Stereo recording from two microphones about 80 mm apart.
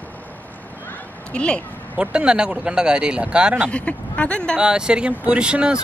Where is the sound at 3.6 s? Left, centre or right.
Centre.